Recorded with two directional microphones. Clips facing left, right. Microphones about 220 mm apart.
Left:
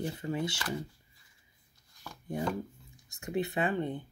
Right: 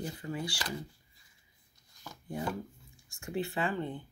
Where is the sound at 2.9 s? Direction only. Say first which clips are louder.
Left 3 dB; 20° left (ahead or behind).